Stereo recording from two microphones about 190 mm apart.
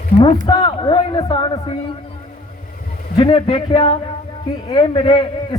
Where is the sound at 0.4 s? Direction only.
25° left (ahead or behind).